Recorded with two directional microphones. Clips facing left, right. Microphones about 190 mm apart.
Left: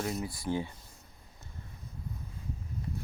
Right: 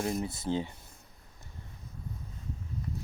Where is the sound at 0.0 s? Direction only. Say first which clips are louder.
Right 2 dB; 25° right (ahead or behind).